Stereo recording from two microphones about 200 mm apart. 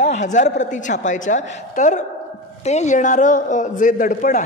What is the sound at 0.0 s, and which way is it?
A man's voice, 35° left (ahead or behind).